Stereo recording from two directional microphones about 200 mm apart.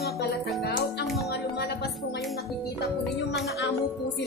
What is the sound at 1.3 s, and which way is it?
Music, 55° left (ahead or behind).